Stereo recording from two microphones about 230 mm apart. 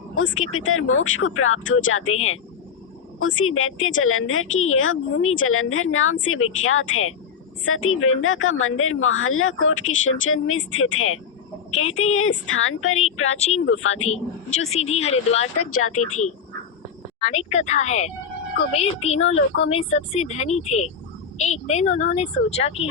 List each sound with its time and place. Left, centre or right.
0.2 s a woman's voice: left
14.6 s a woman's voice: left
15.5 s speech: left
16.0 s a woman's voice: left